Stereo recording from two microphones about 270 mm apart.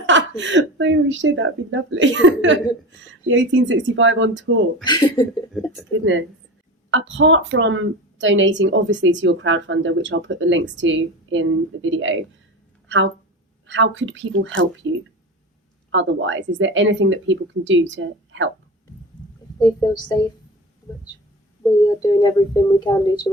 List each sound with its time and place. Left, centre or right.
0.0 s a woman's voice: right
4.8 s speech: centre
5.5 s speech: centre
5.9 s a woman's voice: right
13.7 s a woman's voice: right
15.9 s a woman's voice: right
19.5 s speech: centre
21.6 s speech: centre